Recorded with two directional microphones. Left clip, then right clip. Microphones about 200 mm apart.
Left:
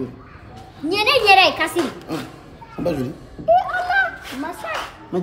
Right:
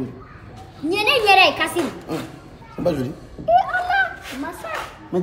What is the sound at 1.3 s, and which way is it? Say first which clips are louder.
A woman's voice: even; 5° left (ahead or behind).